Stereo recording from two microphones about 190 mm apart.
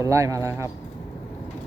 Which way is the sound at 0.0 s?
15° right (ahead or behind).